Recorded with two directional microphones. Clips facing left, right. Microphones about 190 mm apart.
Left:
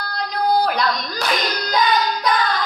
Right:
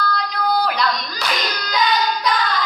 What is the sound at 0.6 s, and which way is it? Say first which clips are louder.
Hands: left 1 dB; 50° left (ahead or behind).